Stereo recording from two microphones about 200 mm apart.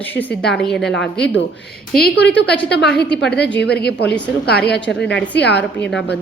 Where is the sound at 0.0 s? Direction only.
10° left (ahead or behind).